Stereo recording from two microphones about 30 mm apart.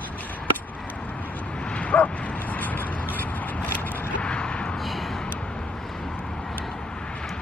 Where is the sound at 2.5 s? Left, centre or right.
Left.